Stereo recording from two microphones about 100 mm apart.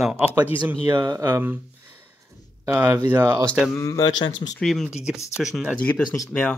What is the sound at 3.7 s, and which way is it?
Speech, 35° left (ahead or behind).